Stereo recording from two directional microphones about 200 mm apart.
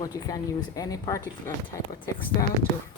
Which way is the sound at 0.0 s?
20° left (ahead or behind).